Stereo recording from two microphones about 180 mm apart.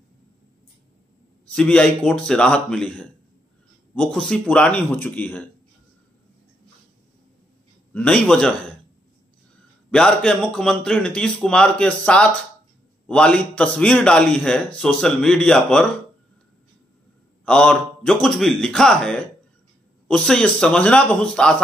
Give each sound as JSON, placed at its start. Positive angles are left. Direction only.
{"t": 1.5, "sound": "a man's voice", "side_deg": 5}
{"t": 7.9, "sound": "a man's voice", "side_deg": 5}
{"t": 9.8, "sound": "a man's voice", "side_deg": 5}
{"t": 17.5, "sound": "a man's voice", "side_deg": 5}